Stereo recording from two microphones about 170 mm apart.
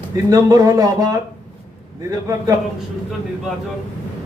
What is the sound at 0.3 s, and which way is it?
Speech, 20° right (ahead or behind).